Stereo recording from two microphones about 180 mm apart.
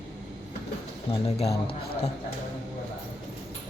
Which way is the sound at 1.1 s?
35° left (ahead or behind).